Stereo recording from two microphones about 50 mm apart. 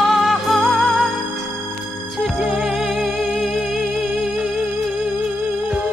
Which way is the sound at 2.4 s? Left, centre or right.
Centre.